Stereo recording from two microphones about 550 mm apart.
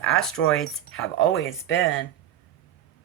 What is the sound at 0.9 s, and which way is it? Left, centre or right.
Speech, left.